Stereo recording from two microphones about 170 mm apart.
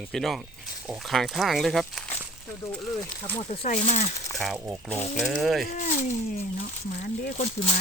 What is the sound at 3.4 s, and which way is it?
Speech, 35° left (ahead or behind).